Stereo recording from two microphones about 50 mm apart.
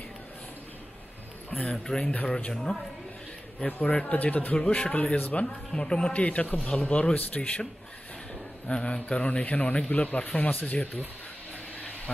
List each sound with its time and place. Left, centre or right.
1.7 s a man's voice: centre
2.0 s a man's voice: left
2.3 s a man's voice: centre
3.6 s a man's voice: left
5.8 s a man's voice: centre
6.2 s a man's voice: left
8.6 s a man's voice: left